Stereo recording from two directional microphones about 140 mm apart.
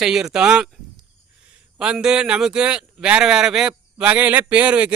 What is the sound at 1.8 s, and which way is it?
Speech, 5° right (ahead or behind).